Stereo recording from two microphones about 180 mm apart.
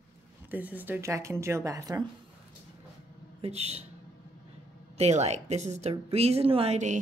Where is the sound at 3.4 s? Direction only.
35° right (ahead or behind).